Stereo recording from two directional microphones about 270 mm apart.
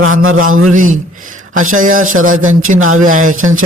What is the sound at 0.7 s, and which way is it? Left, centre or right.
Speech, right.